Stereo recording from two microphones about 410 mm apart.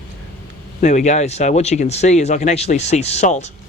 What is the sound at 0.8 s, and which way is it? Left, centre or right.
Speech, centre.